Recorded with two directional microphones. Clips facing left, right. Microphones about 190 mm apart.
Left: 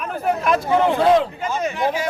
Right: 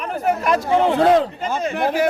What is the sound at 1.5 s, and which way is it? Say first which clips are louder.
Speech: right 2 dB; 55° right (ahead or behind).